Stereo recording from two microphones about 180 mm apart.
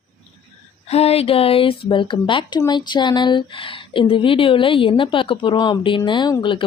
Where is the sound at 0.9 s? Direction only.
35° left (ahead or behind).